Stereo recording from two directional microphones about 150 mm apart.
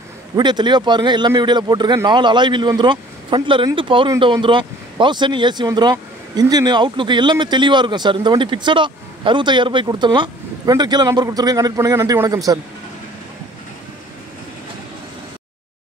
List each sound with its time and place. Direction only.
0.4 s speech: 30° right (ahead or behind)